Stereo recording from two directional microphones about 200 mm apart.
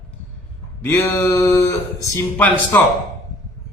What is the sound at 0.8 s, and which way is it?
Speech, 15° left (ahead or behind).